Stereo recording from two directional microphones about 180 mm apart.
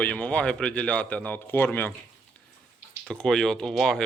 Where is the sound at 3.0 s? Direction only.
5° left (ahead or behind).